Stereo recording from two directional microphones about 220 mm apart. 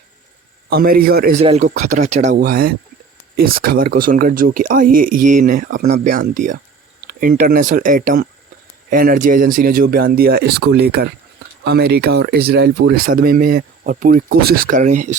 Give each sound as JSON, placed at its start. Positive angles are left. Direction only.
{"t": 0.7, "sound": "speech", "side_deg": -45}
{"t": 1.4, "sound": "speech", "side_deg": -30}